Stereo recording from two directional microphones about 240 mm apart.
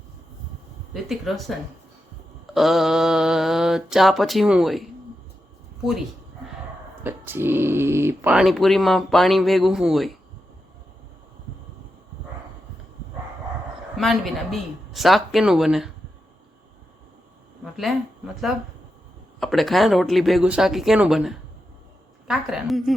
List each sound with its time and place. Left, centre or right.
1.0 s speech: centre
2.6 s mantra: centre
7.0 s speech: centre
13.9 s speech: centre
17.6 s a sound: centre
18.5 s speech: centre